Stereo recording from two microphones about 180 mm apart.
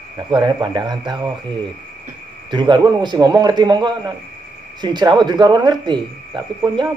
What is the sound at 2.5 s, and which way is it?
Speech, 25° right (ahead or behind).